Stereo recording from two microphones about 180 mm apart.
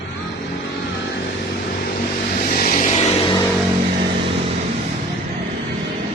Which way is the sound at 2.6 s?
45° left (ahead or behind).